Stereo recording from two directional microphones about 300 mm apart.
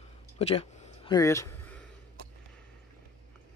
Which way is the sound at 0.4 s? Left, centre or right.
Centre.